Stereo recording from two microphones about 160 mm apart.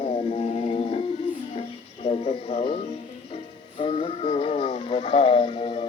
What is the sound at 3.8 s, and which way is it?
Speech, 35° left (ahead or behind).